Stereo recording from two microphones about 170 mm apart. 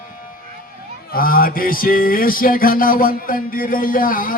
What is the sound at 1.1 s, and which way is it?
Music, 60° left (ahead or behind).